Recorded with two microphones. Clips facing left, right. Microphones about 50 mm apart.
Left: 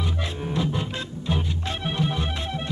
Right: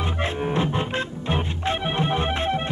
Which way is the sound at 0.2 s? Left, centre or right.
Right.